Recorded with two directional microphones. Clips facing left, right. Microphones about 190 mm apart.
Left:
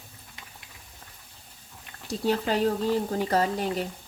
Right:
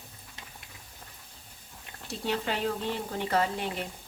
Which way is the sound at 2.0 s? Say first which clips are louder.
Left 5 dB; 40° left (ahead or behind).